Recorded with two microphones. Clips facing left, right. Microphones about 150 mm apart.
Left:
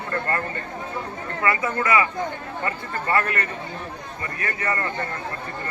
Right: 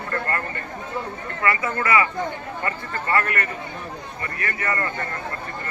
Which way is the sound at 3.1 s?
20° left (ahead or behind).